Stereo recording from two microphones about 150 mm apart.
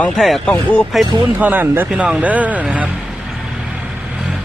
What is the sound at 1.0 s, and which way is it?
Speech, 10° right (ahead or behind).